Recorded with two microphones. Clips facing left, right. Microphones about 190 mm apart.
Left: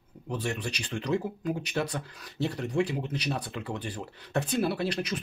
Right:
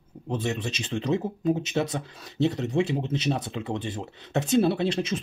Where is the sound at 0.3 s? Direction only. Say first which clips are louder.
Right 4 dB; 20° right (ahead or behind).